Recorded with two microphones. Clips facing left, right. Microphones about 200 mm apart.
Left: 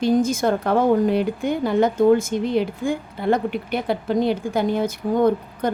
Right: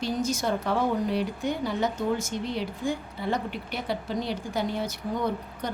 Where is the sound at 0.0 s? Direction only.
50° left (ahead or behind).